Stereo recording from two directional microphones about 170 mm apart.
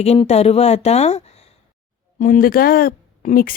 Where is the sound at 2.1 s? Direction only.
50° left (ahead or behind).